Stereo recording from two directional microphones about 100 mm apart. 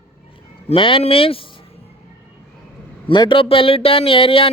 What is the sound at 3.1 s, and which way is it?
Speech, 55° left (ahead or behind).